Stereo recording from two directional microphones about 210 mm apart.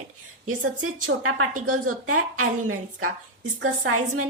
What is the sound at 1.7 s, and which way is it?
A woman's voice, 90° right.